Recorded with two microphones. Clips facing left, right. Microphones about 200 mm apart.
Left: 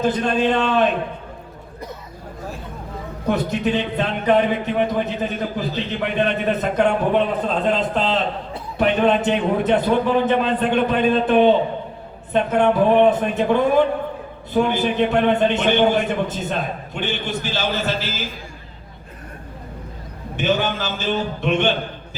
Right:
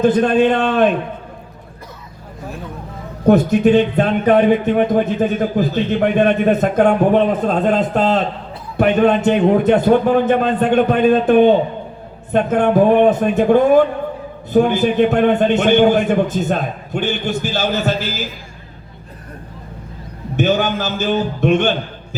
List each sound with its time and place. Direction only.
0.0 s speech: 55° right (ahead or behind)
3.2 s speech: 50° right (ahead or behind)
20.3 s speech: 45° right (ahead or behind)